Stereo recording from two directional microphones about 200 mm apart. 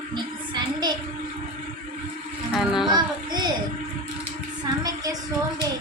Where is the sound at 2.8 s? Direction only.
20° right (ahead or behind).